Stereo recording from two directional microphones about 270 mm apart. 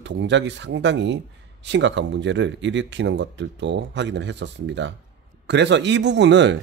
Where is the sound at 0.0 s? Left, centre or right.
Right.